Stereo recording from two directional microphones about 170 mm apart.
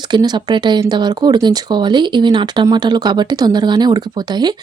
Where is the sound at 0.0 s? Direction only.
25° right (ahead or behind).